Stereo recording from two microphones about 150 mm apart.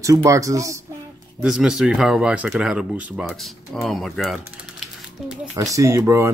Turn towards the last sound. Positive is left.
turn(degrees=-20)  # may be behind; listen again after turning